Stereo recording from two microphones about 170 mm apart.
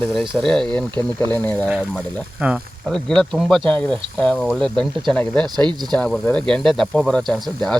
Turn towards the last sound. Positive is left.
turn(degrees=0)  # may be behind; listen again after turning